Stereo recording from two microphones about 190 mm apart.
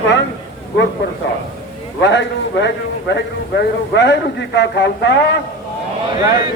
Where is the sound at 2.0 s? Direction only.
70° left (ahead or behind).